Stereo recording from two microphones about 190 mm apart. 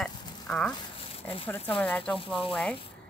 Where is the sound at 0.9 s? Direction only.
30° left (ahead or behind).